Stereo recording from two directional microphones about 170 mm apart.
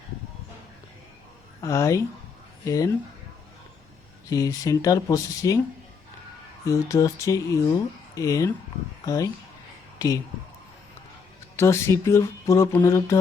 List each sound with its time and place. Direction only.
1.6 s speech: 15° left (ahead or behind)
4.3 s speech: 20° left (ahead or behind)
6.7 s speech: 20° left (ahead or behind)
11.5 s speech: 15° left (ahead or behind)